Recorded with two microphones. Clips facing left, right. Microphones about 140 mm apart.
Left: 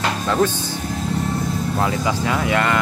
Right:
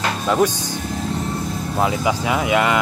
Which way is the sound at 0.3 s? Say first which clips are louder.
Right 2 dB; 15° right (ahead or behind).